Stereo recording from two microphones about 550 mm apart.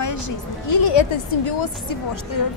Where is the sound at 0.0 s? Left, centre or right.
Left.